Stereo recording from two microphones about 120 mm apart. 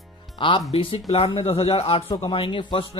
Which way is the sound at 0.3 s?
45° left (ahead or behind).